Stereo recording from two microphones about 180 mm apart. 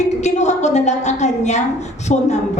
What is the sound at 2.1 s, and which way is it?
Speech, 40° left (ahead or behind).